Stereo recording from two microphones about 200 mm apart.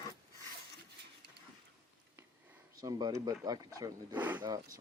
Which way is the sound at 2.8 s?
20° right (ahead or behind).